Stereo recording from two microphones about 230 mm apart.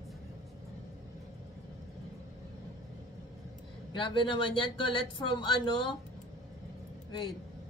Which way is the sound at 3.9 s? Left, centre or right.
Left.